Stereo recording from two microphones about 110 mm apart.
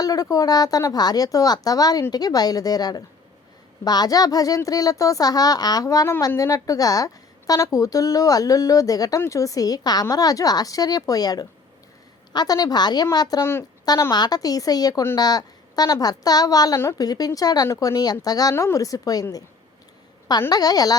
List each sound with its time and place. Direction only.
0.0 s speech: 35° left (ahead or behind)
13.4 s a woman's voice: 20° left (ahead or behind)
13.8 s speech: 35° left (ahead or behind)
20.5 s speech: 35° left (ahead or behind)